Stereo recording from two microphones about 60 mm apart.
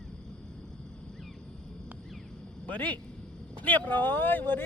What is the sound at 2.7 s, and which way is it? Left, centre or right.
Speech, left.